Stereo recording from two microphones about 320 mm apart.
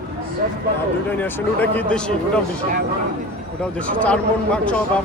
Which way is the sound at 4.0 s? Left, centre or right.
Centre.